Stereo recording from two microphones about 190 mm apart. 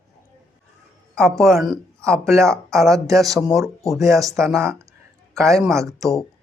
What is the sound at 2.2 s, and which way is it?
Speech, 15° right (ahead or behind).